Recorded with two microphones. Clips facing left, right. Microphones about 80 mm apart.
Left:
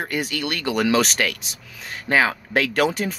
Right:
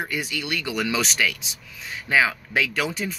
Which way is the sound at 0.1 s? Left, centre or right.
Left.